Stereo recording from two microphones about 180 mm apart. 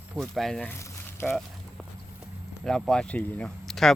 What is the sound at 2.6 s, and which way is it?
Speech, centre (ahead or behind).